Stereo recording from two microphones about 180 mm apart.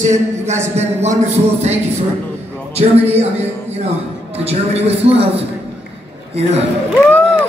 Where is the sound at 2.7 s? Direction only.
35° right (ahead or behind).